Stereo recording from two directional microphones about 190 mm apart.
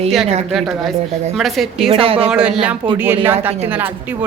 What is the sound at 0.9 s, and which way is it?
Speech, 35° right (ahead or behind).